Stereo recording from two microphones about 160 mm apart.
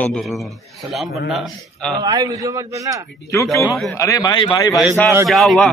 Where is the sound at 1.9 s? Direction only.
25° right (ahead or behind).